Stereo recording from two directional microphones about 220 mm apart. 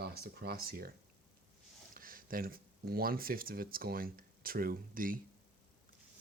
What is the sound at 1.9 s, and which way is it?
Speech, 40° right (ahead or behind).